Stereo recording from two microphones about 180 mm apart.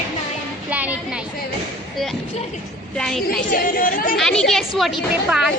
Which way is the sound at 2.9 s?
5° left (ahead or behind).